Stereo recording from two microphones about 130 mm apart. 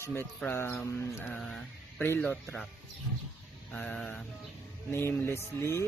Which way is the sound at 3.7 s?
5° left (ahead or behind).